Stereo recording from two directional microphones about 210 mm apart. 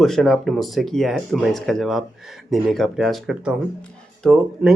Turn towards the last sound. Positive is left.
turn(degrees=0)  # may be behind; listen again after turning